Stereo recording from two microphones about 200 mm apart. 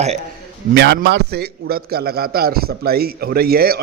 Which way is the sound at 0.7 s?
55° right (ahead or behind).